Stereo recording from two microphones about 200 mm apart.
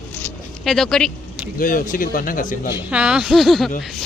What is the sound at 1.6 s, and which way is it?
Speech, 40° left (ahead or behind).